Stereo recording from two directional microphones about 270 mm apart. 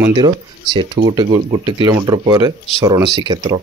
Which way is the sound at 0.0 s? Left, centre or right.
Centre.